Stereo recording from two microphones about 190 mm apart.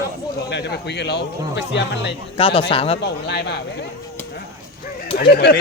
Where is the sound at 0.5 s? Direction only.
65° left (ahead or behind).